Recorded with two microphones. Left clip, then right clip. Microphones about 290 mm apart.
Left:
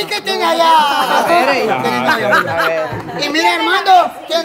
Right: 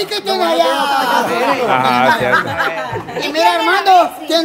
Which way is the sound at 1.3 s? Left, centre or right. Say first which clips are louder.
Left 3 dB; left.